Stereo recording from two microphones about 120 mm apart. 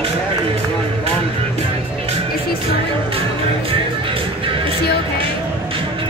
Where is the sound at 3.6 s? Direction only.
45° right (ahead or behind).